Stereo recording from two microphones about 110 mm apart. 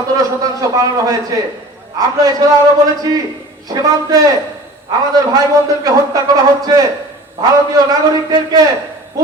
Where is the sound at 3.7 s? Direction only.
35° right (ahead or behind).